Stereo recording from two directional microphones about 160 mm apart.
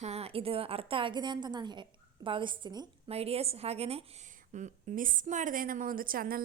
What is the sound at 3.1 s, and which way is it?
A woman's voice, 40° right (ahead or behind).